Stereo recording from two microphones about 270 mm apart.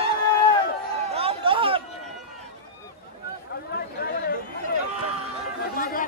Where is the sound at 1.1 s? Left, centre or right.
Right.